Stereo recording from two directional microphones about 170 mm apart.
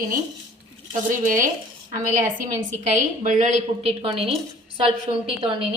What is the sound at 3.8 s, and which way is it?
Speech, 35° right (ahead or behind).